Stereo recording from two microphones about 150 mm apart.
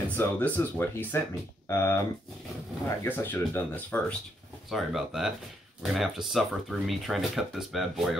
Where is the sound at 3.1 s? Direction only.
15° left (ahead or behind).